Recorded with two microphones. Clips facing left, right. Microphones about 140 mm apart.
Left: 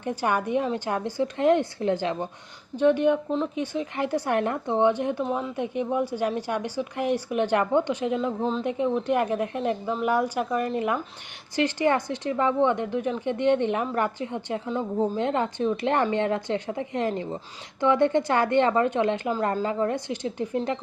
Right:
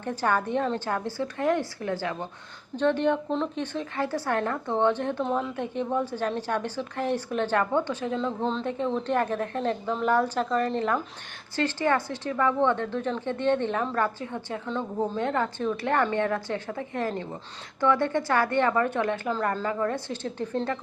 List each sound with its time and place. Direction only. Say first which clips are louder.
0.0 s a woman's voice: left 1 dB; 15° left (ahead or behind)
8.4 s a woman's voice: left 2 dB; 5° left (ahead or behind)